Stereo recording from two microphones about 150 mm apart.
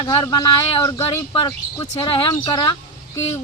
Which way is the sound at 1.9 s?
30° left (ahead or behind).